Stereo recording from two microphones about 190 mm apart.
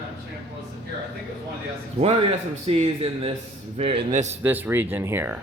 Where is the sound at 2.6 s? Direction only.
30° right (ahead or behind).